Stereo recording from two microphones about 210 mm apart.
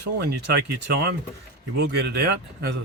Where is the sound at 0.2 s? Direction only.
50° right (ahead or behind).